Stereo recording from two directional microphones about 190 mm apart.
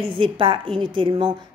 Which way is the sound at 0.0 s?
25° right (ahead or behind).